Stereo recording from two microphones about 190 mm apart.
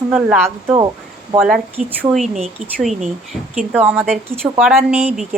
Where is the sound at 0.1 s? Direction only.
10° right (ahead or behind).